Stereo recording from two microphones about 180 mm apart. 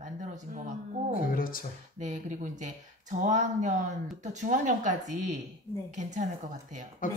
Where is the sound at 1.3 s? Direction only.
50° left (ahead or behind).